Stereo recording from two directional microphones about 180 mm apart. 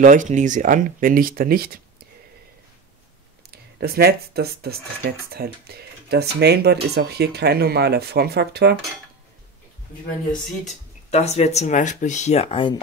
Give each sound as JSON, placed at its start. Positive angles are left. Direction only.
{"t": 0.0, "sound": "speech", "side_deg": -45}
{"t": 3.8, "sound": "speech", "side_deg": -60}
{"t": 11.1, "sound": "speech", "side_deg": 35}